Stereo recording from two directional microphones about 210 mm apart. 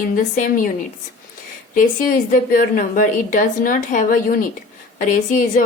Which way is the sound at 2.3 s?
40° left (ahead or behind).